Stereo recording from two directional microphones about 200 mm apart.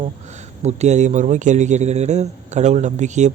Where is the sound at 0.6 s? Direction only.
35° right (ahead or behind).